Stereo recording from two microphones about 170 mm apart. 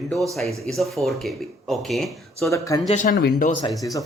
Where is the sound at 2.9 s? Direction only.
50° left (ahead or behind).